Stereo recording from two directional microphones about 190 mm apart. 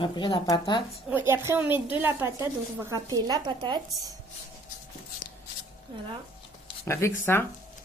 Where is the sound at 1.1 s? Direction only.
10° right (ahead or behind).